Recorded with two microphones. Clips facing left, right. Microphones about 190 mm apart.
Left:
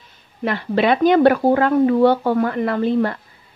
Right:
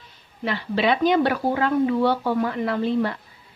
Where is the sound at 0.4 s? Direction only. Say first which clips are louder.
Left 5 dB; 55° left (ahead or behind).